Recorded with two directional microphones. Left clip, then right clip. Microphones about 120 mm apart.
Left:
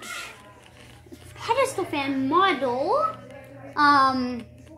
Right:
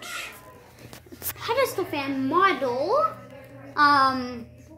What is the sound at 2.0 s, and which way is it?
A woman's voice, 10° left (ahead or behind).